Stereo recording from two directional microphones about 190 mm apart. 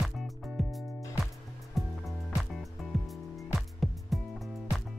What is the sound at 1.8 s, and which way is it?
Music, centre (ahead or behind).